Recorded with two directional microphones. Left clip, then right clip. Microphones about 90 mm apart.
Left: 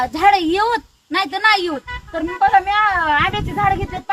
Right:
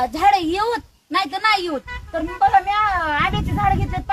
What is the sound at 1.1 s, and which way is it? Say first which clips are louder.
Speech: left 3 dB; 40° right (ahead or behind).